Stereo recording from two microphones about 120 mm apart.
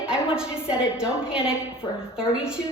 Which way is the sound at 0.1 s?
5° right (ahead or behind).